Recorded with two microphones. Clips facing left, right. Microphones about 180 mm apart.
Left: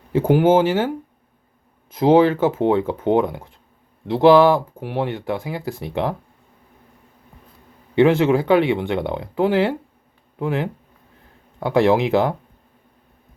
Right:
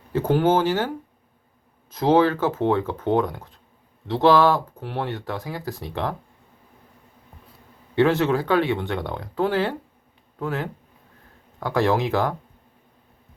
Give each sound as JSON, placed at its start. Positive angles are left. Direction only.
{"t": 0.1, "sound": "speech", "side_deg": 15}
{"t": 1.9, "sound": "speech", "side_deg": 15}
{"t": 7.9, "sound": "speech", "side_deg": 15}